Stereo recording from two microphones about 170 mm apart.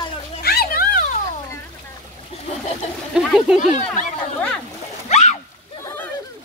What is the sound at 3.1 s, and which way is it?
Speech, 5° right (ahead or behind).